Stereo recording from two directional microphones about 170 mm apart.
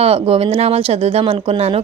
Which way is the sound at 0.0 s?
35° right (ahead or behind).